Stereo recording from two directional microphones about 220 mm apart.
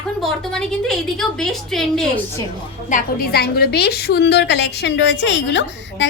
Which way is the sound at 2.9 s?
40° left (ahead or behind).